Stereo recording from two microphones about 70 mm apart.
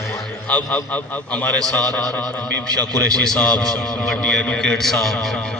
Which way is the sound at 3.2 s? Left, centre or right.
Centre.